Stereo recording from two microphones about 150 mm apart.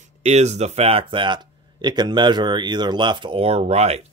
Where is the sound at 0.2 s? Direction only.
45° right (ahead or behind).